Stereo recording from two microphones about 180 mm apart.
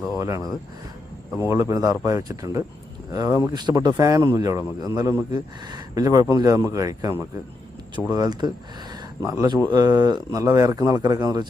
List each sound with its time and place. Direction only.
0.2 s speech: 20° right (ahead or behind)